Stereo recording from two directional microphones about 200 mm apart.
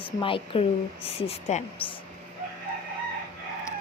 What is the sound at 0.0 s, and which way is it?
Speech, 25° left (ahead or behind).